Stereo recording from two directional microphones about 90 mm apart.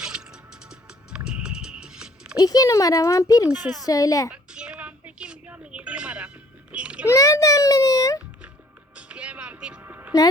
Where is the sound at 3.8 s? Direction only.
40° left (ahead or behind).